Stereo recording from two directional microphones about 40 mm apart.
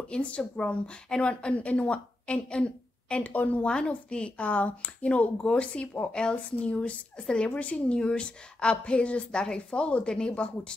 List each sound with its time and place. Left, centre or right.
0.1 s a woman's voice: left
3.3 s speech: left
3.6 s speech: left